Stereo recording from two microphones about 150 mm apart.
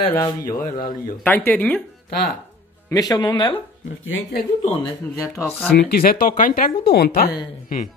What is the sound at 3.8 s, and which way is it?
Speech, 75° left (ahead or behind).